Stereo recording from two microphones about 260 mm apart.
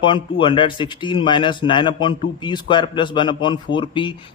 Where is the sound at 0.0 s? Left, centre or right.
Centre.